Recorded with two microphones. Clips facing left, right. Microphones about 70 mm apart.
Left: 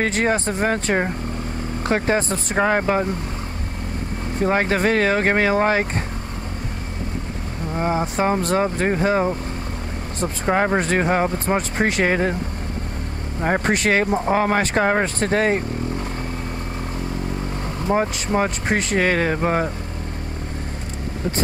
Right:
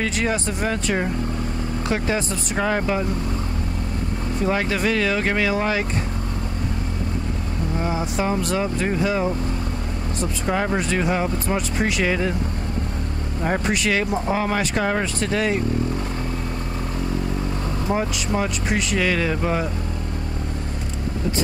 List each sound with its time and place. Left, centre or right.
0.0 s speech: left
4.4 s speech: left
7.8 s speech: left
13.4 s speech: left
17.8 s speech: left